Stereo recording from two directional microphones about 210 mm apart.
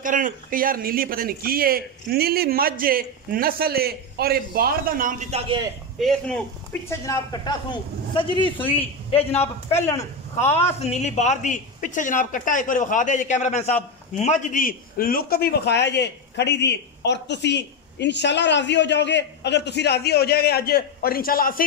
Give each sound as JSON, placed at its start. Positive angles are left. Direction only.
{"t": 0.0, "sound": "a man's voice", "side_deg": -40}
{"t": 5.9, "sound": "speech", "side_deg": 0}
{"t": 6.9, "sound": "a man's voice", "side_deg": 15}
{"t": 10.8, "sound": "a man's voice", "side_deg": 30}